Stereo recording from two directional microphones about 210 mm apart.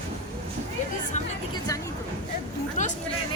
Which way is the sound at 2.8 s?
35° left (ahead or behind).